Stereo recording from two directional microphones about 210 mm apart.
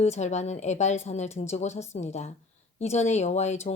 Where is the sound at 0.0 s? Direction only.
35° left (ahead or behind).